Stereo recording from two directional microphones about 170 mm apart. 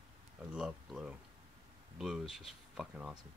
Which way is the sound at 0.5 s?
5° right (ahead or behind).